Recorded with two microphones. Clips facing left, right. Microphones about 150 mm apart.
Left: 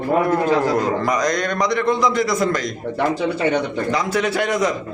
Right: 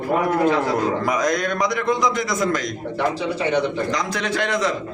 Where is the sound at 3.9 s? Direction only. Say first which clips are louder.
Left 4 dB; 10° left (ahead or behind).